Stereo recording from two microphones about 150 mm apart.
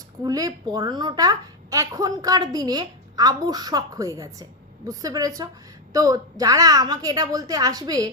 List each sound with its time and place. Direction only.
0.2 s a woman's voice: 25° right (ahead or behind)